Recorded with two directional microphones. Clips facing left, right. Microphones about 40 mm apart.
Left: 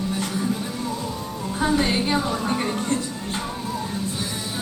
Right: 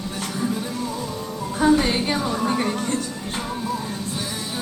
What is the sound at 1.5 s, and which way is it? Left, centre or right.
Music, centre.